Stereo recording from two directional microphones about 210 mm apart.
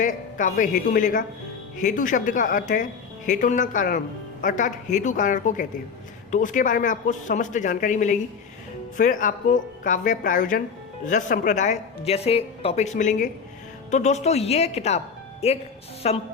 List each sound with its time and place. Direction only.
0.0 s speech: 40° left (ahead or behind)